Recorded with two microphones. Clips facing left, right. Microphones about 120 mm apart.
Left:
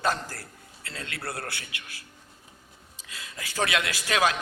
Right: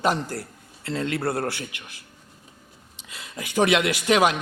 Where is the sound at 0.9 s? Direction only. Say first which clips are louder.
Right 11 dB; 30° right (ahead or behind).